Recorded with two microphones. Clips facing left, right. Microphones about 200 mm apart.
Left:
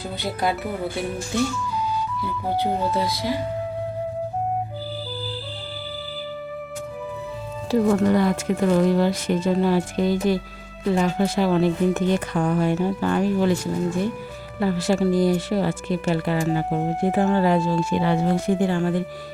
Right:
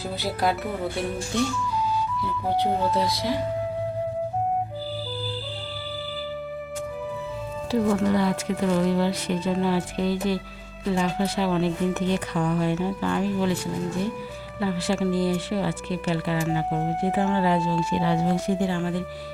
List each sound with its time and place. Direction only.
0.2 s speech: centre (ahead or behind)
7.7 s speech: 45° left (ahead or behind)
14.6 s speech: 45° left (ahead or behind)